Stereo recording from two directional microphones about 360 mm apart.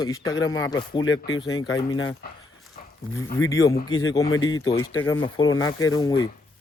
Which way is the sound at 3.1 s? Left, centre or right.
Centre.